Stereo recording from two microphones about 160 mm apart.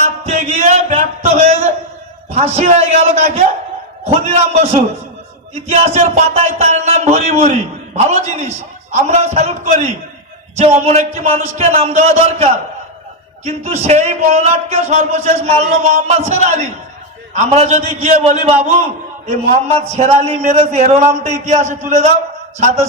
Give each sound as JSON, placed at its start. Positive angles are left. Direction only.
{"t": 0.0, "sound": "a sound", "side_deg": -45}
{"t": 2.3, "sound": "a man's voice", "side_deg": -40}
{"t": 20.0, "sound": "speech", "side_deg": -45}